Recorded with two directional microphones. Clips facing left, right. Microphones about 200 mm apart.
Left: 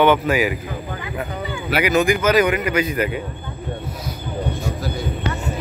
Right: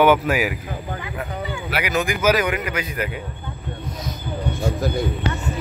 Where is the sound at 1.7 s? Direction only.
Centre (ahead or behind).